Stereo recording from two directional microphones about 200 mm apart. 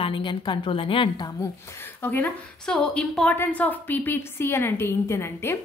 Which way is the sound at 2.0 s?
10° left (ahead or behind).